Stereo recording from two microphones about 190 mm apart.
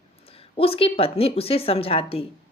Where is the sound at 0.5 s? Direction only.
30° left (ahead or behind).